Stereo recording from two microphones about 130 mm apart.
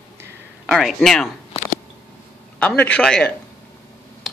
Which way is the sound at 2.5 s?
10° left (ahead or behind).